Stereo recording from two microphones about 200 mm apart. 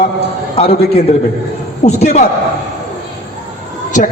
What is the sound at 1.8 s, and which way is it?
Speech, 35° left (ahead or behind).